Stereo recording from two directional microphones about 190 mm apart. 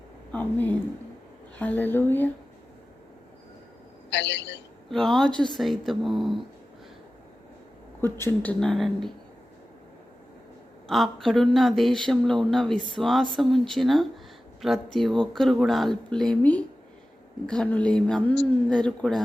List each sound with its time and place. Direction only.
0.3 s speech: 10° left (ahead or behind)
4.1 s a man's voice: 70° left (ahead or behind)
4.9 s speech: centre (ahead or behind)
8.0 s speech: 10° left (ahead or behind)
10.8 s speech: centre (ahead or behind)